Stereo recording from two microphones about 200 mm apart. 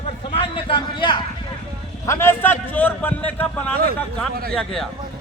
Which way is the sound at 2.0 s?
10° left (ahead or behind).